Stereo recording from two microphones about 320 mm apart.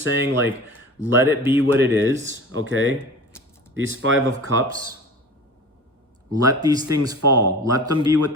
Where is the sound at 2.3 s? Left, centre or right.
Right.